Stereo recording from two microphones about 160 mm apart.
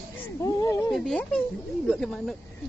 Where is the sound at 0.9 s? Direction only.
5° left (ahead or behind).